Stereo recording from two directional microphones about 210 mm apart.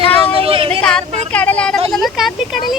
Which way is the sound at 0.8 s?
5° left (ahead or behind).